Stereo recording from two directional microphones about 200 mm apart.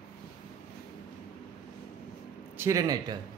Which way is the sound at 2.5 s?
15° right (ahead or behind).